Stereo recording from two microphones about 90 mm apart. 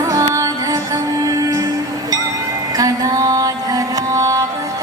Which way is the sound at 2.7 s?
40° right (ahead or behind).